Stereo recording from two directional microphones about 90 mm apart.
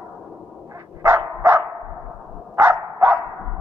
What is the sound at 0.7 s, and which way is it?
Dog, 35° right (ahead or behind).